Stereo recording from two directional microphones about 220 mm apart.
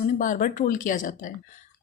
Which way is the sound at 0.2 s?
35° left (ahead or behind).